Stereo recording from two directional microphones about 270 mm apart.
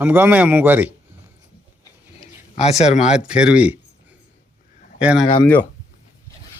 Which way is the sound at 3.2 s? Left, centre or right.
Centre.